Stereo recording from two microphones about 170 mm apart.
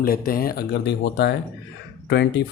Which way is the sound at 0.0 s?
60° left (ahead or behind).